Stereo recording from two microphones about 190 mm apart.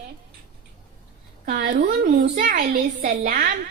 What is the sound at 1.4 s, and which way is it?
A woman's voice, 50° right (ahead or behind).